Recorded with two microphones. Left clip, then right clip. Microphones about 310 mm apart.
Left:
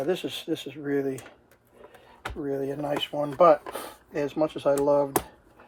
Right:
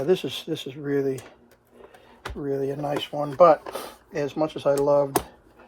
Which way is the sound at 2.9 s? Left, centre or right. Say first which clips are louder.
Right 1 dB; centre.